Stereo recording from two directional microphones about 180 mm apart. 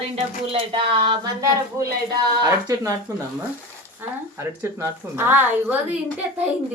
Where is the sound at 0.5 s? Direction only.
30° right (ahead or behind).